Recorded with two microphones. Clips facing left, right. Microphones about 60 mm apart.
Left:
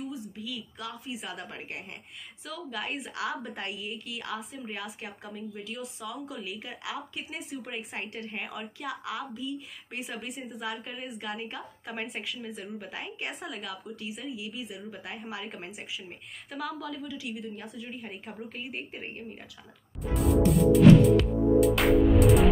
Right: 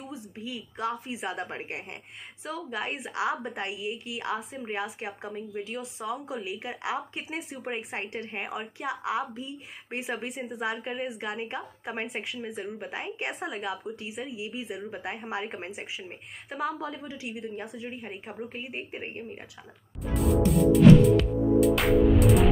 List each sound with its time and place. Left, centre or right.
0.1 s a woman's voice: right
2.7 s a woman's voice: right
3.5 s a woman's voice: centre; by 10.2 s right
10.2 s a woman's voice: right
10.8 s a woman's voice: right
18.0 s a woman's voice: centre
20.0 s music: centre